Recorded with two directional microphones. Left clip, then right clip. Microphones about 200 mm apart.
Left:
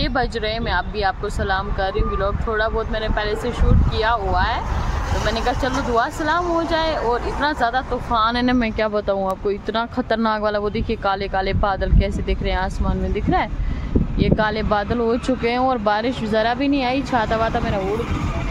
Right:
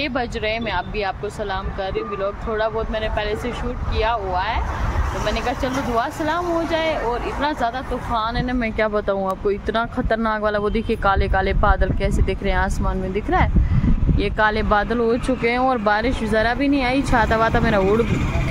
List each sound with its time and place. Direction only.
0.0 s speech: 5° left (ahead or behind)
4.0 s speech: 5° left (ahead or behind)
8.3 s speech: 40° left (ahead or behind)
8.7 s speech: 5° left (ahead or behind); by 17.7 s 10° right (ahead or behind)